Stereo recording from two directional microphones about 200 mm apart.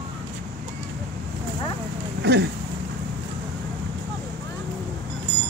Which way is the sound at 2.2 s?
55° right (ahead or behind).